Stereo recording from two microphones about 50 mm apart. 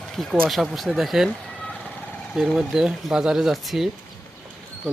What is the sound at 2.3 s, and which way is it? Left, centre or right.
Speech, centre.